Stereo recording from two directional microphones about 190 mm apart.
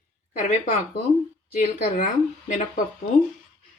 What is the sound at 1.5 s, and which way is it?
Speech, 40° left (ahead or behind).